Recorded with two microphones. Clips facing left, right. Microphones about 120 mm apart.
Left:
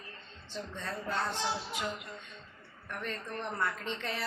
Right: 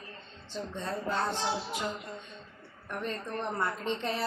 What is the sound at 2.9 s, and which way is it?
A woman's voice, 30° right (ahead or behind).